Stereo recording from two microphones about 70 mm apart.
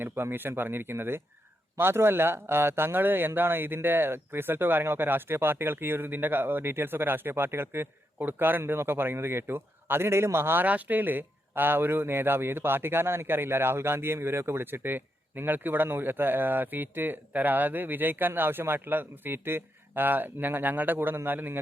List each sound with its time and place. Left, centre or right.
0.0 s a man's voice: right